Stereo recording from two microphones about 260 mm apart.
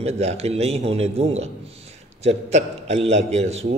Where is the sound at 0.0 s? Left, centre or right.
Right.